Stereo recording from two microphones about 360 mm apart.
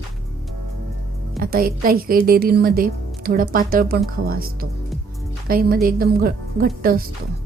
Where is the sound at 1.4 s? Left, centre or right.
Right.